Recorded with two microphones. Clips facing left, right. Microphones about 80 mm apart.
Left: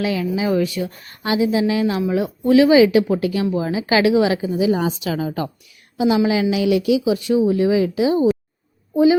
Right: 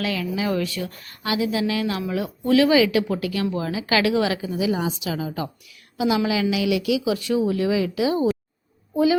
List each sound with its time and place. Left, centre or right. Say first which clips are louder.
0.0 s a woman's voice: left 4 dB; left
4.8 s a woman's voice: left 4 dB; left
6.0 s a woman's voice: left 4 dB; left